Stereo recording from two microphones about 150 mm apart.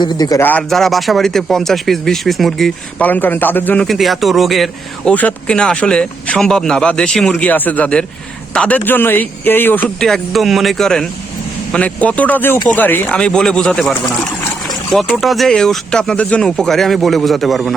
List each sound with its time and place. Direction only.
0.0 s speech: 25° left (ahead or behind)
0.7 s speech: centre (ahead or behind)
3.8 s speech: centre (ahead or behind)
14.9 s speech: centre (ahead or behind)